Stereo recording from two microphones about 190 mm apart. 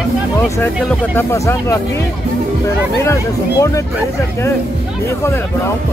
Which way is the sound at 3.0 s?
15° left (ahead or behind).